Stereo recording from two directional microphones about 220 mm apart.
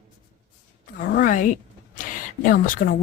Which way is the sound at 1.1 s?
35° left (ahead or behind).